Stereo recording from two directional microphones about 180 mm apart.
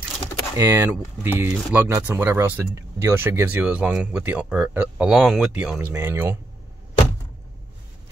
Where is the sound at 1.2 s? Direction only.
10° right (ahead or behind).